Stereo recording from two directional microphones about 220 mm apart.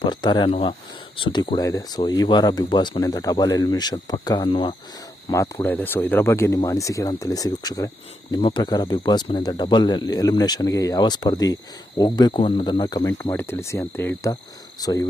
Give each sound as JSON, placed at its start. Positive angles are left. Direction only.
{"t": 0.0, "sound": "speech", "side_deg": 20}